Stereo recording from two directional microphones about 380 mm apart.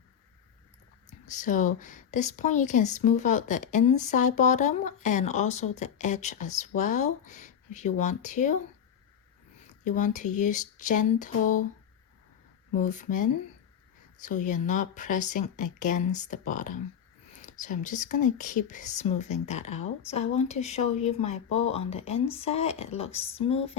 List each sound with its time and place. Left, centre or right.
1.3 s a woman's voice: centre
9.6 s a woman's voice: centre
12.7 s a woman's voice: centre